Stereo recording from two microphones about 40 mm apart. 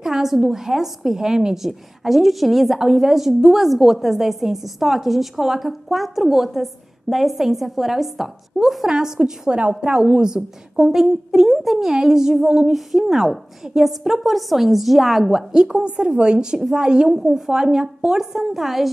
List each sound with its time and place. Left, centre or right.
0.0 s a woman's voice: centre
9.5 s a woman's voice: right
12.7 s a woman's voice: centre
15.5 s a woman's voice: right; by 18.9 s centre